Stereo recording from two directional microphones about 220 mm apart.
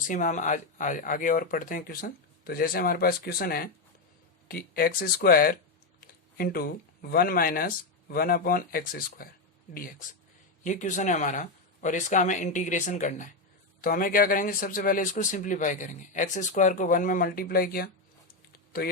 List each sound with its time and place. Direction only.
0.1 s a man's voice: 35° left (ahead or behind)
10.6 s a man's voice: 35° left (ahead or behind)
18.3 s a sound: 40° left (ahead or behind)